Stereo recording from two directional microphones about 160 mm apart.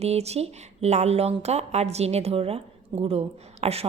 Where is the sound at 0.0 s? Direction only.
40° right (ahead or behind).